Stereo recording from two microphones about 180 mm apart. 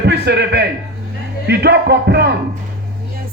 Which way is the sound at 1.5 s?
65° right (ahead or behind).